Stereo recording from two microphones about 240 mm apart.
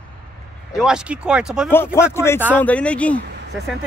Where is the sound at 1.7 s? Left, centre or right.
Centre.